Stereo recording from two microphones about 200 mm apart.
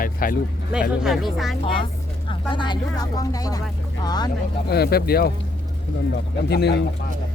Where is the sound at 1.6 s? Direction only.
25° left (ahead or behind).